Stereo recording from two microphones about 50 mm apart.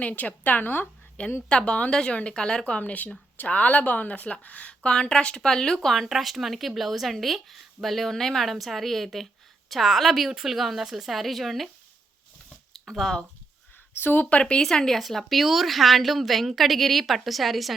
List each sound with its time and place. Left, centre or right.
0.0 s a woman's voice: left
1.5 s speech: left
5.9 s speech: centre
12.9 s speech: centre
13.9 s speech: left
14.3 s speech: left
14.6 s speech: centre